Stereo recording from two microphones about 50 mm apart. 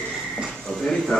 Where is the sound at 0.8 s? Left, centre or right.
Centre.